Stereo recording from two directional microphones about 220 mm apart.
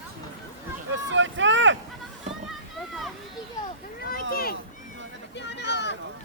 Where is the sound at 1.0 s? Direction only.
55° right (ahead or behind).